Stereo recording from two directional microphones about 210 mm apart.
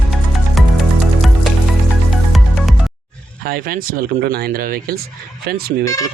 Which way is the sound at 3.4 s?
45° right (ahead or behind).